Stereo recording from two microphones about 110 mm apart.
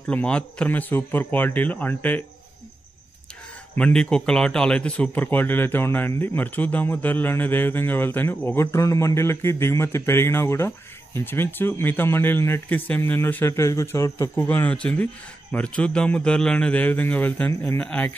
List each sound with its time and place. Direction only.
0.0 s speech: 10° left (ahead or behind)
3.7 s speech: 10° left (ahead or behind); by 14.3 s 30° left (ahead or behind)
14.3 s speech: 20° left (ahead or behind)